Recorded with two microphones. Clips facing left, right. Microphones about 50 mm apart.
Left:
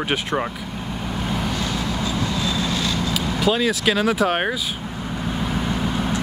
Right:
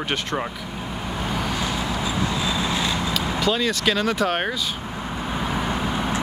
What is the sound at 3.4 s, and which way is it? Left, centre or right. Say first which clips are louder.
Speech: left 4 dB; centre.